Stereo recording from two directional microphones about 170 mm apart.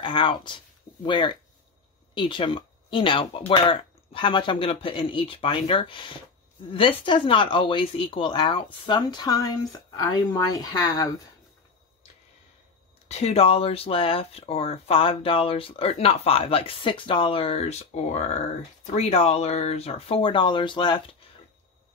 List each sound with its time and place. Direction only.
0.0 s speech: 30° left (ahead or behind)
13.1 s speech: 40° left (ahead or behind)